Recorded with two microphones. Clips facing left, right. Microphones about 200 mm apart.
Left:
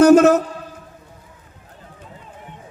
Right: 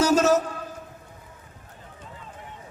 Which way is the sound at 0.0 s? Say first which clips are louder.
Left 9 dB; 55° left (ahead or behind).